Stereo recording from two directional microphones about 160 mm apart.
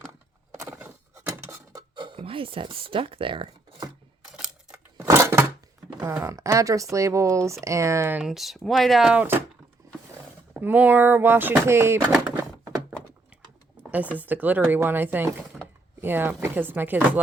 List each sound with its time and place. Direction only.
0.6 s a sound: 15° right (ahead or behind)
2.0 s speech: 30° right (ahead or behind)
4.3 s camera: 5° right (ahead or behind)
4.9 s a sound: 15° right (ahead or behind)
6.0 s speech: 15° right (ahead or behind)
8.2 s speech: centre (ahead or behind)
10.5 s speech: 10° right (ahead or behind)
13.8 s a sound: 10° right (ahead or behind)
14.2 s speech: 10° right (ahead or behind)